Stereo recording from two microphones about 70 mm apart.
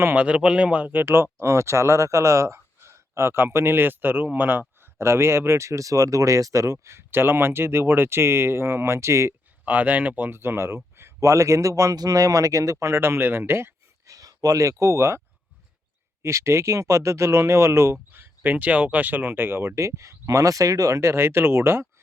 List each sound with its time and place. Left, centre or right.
0.0 s speech: right
4.8 s speech: right
9.6 s speech: right
14.1 s speech: right
16.2 s speech: right